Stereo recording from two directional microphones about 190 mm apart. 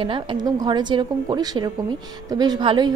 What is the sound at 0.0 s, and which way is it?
A woman's voice, 25° right (ahead or behind).